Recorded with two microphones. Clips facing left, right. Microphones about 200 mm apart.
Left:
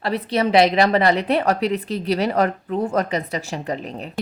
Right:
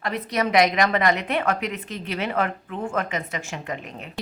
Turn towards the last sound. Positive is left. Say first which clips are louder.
# left 6 dB
turn(degrees=35)  # may be behind; listen again after turning